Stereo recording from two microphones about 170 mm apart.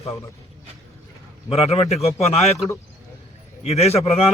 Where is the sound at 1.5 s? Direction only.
35° left (ahead or behind).